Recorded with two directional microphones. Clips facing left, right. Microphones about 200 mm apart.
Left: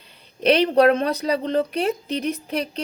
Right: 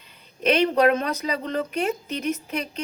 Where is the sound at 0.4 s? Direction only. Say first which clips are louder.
Left 3 dB; 35° left (ahead or behind).